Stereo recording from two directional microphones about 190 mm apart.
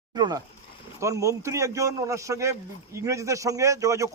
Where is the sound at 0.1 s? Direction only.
20° right (ahead or behind).